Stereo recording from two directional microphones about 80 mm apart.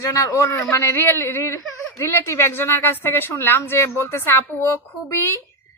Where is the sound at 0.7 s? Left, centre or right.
Left.